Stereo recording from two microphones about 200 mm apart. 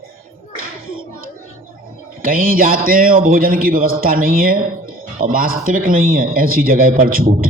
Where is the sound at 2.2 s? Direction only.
45° right (ahead or behind).